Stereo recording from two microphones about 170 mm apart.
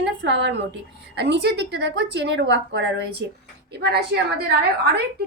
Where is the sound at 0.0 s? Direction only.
90° right.